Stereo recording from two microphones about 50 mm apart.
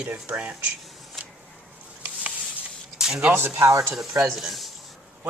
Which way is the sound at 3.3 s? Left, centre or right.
Right.